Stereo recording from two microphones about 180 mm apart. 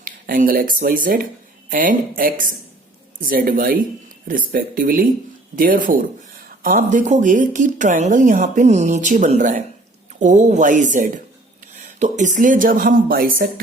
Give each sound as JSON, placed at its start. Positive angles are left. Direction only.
{"t": 0.0, "sound": "speech", "side_deg": -50}